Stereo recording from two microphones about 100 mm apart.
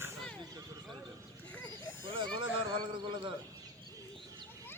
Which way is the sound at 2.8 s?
55° right (ahead or behind).